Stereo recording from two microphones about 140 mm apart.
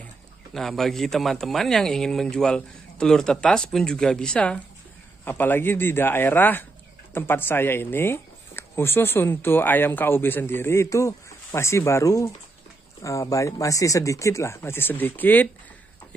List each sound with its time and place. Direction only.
0.6 s a man's voice: centre (ahead or behind)